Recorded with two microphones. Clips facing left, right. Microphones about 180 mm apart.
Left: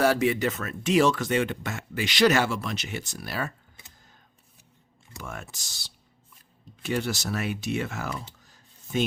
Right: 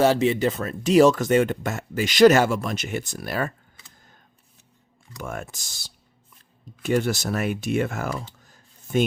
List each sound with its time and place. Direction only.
0.0 s speech: 25° right (ahead or behind); by 3.5 s 50° right (ahead or behind)
5.2 s speech: 50° right (ahead or behind)